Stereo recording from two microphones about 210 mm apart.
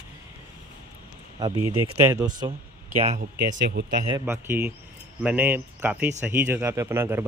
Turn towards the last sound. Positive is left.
turn(degrees=-10)  # may be behind; listen again after turning